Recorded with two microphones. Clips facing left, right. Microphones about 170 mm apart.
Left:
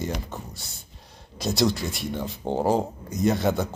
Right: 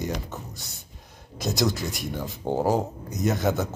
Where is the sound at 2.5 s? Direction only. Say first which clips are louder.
Right 1 dB; 20° left (ahead or behind).